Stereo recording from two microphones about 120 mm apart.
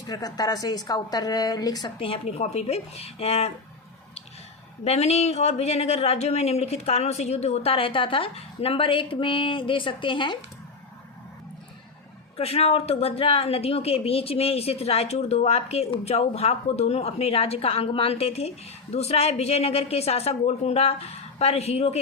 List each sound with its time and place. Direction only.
0.1 s a woman's voice: 30° left (ahead or behind)
2.0 s speech: 55° left (ahead or behind)
4.8 s speech: 60° left (ahead or behind); by 10.3 s 45° left (ahead or behind)
12.4 s speech: 55° left (ahead or behind)